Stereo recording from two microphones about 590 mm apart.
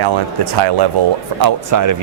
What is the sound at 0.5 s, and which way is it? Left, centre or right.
Speech, right.